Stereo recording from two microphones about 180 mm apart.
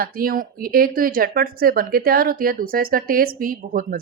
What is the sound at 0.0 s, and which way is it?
Speech, 55° right (ahead or behind).